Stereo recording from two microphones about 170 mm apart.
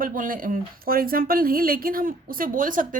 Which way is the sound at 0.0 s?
55° right (ahead or behind).